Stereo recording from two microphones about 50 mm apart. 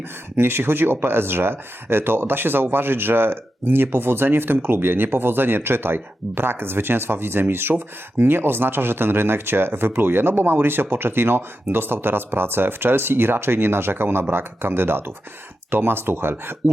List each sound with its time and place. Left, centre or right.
0.3 s speech: right